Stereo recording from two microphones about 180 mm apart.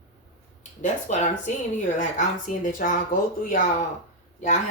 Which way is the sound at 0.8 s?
40° left (ahead or behind).